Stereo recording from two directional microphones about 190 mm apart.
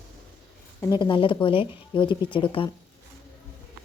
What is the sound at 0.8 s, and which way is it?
Speech, 25° left (ahead or behind).